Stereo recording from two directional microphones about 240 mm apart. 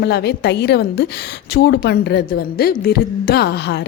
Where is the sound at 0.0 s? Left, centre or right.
Left.